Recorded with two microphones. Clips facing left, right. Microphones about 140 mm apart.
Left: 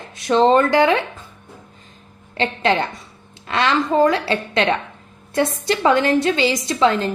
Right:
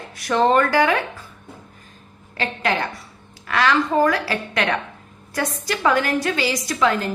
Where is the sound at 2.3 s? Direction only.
25° left (ahead or behind).